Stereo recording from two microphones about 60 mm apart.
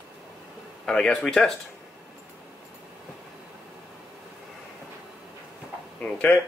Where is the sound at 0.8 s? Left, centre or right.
Centre.